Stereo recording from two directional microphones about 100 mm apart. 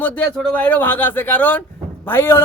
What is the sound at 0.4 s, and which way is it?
A man's voice, 15° left (ahead or behind).